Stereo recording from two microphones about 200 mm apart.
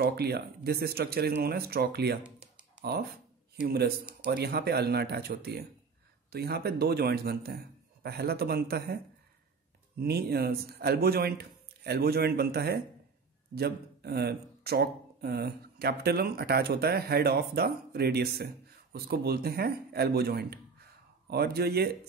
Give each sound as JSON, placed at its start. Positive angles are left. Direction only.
{"t": 0.0, "sound": "speech", "side_deg": -50}